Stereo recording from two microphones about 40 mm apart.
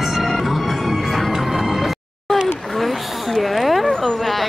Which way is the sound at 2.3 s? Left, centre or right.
Centre.